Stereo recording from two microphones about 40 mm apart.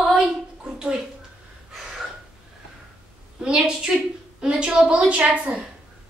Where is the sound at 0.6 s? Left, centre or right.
Centre.